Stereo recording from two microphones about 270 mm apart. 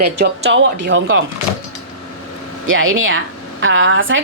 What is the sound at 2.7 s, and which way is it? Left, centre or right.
A woman's voice, right.